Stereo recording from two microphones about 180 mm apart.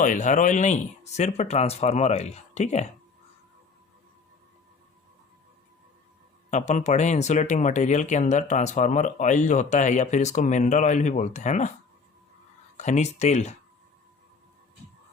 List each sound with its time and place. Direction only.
0.0 s speech: 45° left (ahead or behind)
6.5 s speech: 40° left (ahead or behind)
12.7 s speech: 40° left (ahead or behind)